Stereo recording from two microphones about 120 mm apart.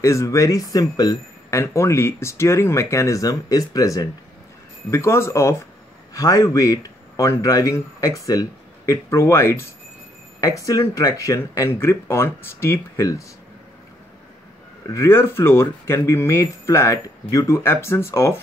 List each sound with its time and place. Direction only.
0.0 s speech: 25° left (ahead or behind)
14.9 s speech: 20° left (ahead or behind)